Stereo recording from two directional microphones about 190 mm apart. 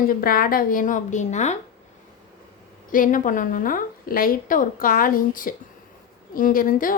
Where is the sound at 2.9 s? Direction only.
45° left (ahead or behind).